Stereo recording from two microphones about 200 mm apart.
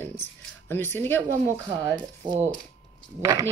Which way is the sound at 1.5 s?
15° right (ahead or behind).